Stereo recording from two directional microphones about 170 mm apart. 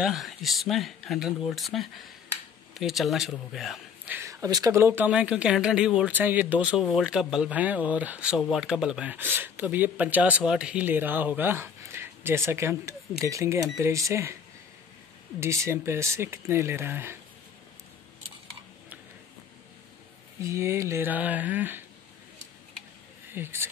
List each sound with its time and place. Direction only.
0.0 s speech: centre (ahead or behind)
4.2 s speech: 20° right (ahead or behind)
15.4 s speech: 15° right (ahead or behind)
20.3 s speech: 15° right (ahead or behind)
23.3 s speech: 15° right (ahead or behind)